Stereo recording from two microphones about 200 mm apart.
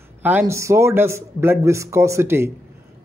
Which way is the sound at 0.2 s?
10° right (ahead or behind).